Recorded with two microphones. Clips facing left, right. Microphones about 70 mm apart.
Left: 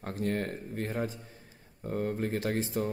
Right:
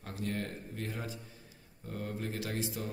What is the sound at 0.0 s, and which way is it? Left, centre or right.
Speech, left.